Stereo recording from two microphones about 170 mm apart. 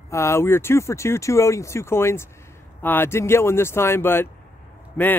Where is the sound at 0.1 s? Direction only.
15° left (ahead or behind).